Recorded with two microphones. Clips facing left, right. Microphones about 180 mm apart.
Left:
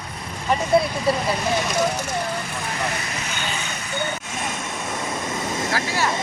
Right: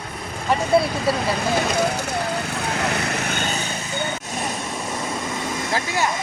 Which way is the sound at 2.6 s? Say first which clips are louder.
Right 4 dB; 70° right (ahead or behind).